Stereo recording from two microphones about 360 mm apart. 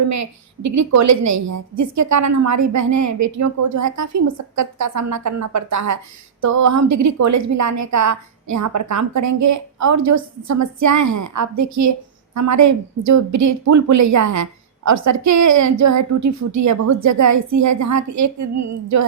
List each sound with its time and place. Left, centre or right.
0.0 s a woman's voice: right